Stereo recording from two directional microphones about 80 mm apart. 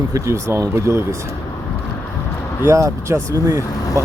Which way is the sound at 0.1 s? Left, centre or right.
Right.